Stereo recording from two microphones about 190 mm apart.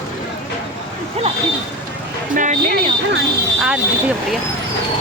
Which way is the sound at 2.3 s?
45° right (ahead or behind).